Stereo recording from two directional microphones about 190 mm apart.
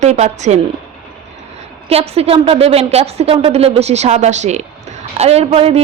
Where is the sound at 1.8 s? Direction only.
30° right (ahead or behind).